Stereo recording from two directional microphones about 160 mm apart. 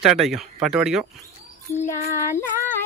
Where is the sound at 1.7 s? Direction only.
15° left (ahead or behind).